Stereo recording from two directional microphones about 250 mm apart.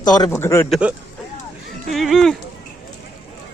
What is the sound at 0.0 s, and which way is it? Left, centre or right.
Speech, centre.